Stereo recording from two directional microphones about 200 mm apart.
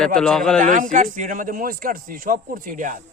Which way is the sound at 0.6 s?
40° right (ahead or behind).